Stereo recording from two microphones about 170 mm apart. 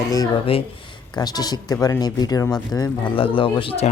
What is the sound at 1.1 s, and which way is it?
Speech, 25° left (ahead or behind).